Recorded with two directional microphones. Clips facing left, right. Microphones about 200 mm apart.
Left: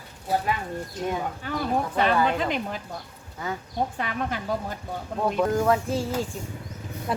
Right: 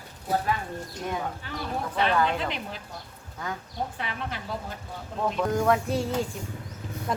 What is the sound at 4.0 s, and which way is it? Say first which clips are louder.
Speech: left 5 dB; 50° left (ahead or behind).